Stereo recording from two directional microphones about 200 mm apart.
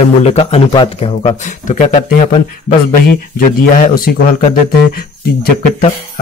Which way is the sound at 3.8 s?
40° left (ahead or behind).